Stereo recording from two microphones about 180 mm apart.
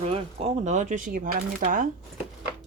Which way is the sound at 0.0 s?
30° right (ahead or behind).